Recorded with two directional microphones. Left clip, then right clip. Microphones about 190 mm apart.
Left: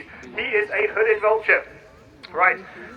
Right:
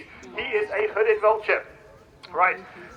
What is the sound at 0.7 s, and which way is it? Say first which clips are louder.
Speech: even; 50° right (ahead or behind).